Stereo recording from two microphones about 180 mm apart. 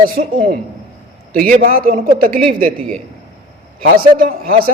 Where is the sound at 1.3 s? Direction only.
50° right (ahead or behind).